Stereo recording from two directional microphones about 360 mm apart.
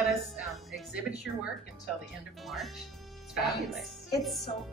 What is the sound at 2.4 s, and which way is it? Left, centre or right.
Speech, centre.